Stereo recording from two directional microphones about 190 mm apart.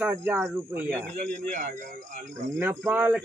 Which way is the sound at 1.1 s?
40° right (ahead or behind).